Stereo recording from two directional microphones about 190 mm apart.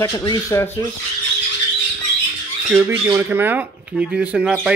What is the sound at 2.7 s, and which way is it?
Speech, 10° right (ahead or behind).